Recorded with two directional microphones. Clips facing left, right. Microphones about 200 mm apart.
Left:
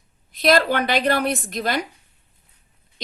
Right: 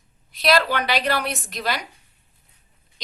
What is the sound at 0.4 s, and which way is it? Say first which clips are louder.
A woman's voice: left 2 dB; 50° left (ahead or behind).